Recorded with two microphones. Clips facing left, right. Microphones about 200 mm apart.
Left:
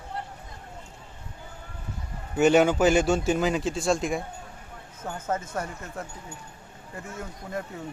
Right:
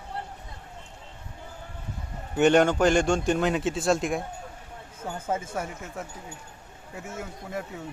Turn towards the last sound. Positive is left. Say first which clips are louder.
# even
turn(degrees=-5)  # may be behind; listen again after turning